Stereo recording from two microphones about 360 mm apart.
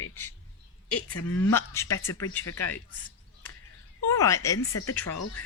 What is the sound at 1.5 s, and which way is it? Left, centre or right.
Speech, centre.